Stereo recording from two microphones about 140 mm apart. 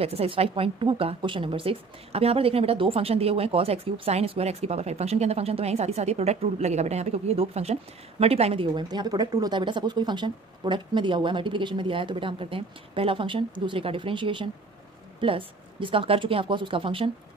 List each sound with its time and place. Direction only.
0.0 s a woman's voice: 45° right (ahead or behind)
8.7 s speech: 30° right (ahead or behind)